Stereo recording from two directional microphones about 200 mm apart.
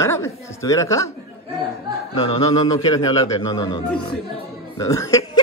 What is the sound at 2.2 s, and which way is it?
A man's voice, 20° left (ahead or behind).